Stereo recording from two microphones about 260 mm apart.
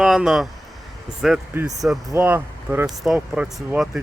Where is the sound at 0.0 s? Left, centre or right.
Centre.